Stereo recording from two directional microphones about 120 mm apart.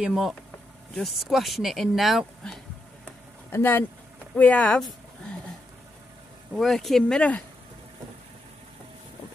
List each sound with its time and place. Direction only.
0.0 s speech: centre (ahead or behind)
3.4 s speech: 15° left (ahead or behind)
6.5 s speech: centre (ahead or behind)